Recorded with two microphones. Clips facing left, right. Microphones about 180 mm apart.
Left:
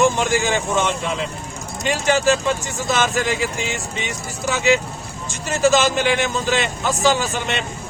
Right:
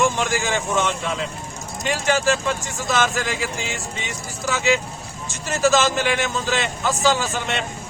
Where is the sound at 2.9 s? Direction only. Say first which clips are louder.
Left 2 dB; 20° left (ahead or behind).